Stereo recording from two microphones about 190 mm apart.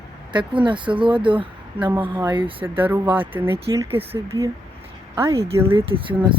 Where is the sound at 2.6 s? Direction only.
10° right (ahead or behind).